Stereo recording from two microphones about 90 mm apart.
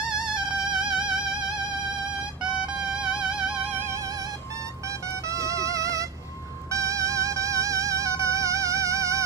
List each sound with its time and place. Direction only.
0.3 s music: 10° right (ahead or behind)
2.6 s music: 10° right (ahead or behind)
4.8 s music: 35° right (ahead or behind)